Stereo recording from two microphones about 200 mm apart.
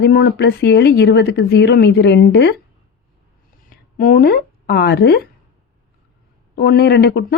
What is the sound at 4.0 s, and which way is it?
Speech, 45° left (ahead or behind).